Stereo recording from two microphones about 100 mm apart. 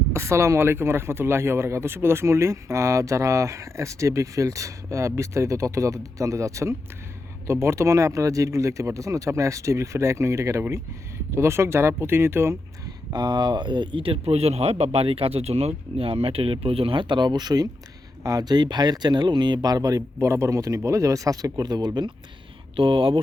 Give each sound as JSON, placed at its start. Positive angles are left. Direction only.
{"t": 0.1, "sound": "speech", "side_deg": -25}
{"t": 13.1, "sound": "speech", "side_deg": -45}
{"t": 22.7, "sound": "speech", "side_deg": -60}